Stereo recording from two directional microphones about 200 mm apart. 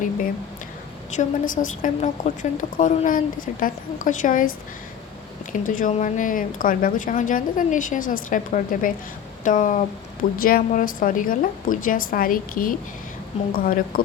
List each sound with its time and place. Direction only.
1.1 s a woman's voice: 40° left (ahead or behind)